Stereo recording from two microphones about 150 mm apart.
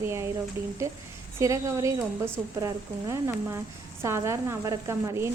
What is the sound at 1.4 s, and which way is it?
Speech, 20° right (ahead or behind).